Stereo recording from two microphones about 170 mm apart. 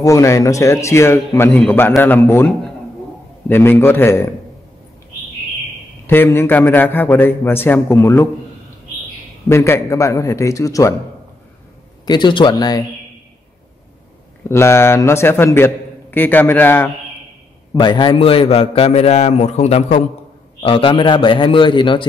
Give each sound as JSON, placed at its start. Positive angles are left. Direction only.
{"t": 0.0, "sound": "a man's voice", "side_deg": 20}
{"t": 6.0, "sound": "a man's voice", "side_deg": 15}
{"t": 9.5, "sound": "a man's voice", "side_deg": 15}
{"t": 12.1, "sound": "a man's voice", "side_deg": 25}
{"t": 14.5, "sound": "a man's voice", "side_deg": 15}
{"t": 17.7, "sound": "a man's voice", "side_deg": 25}